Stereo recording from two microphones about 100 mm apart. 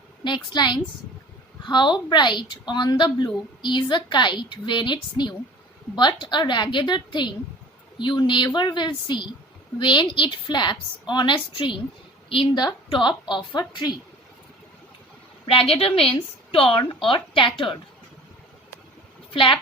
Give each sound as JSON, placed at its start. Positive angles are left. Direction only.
{"t": 0.3, "sound": "a woman's voice", "side_deg": 45}
{"t": 15.4, "sound": "a woman's voice", "side_deg": 70}
{"t": 19.3, "sound": "speech", "side_deg": 60}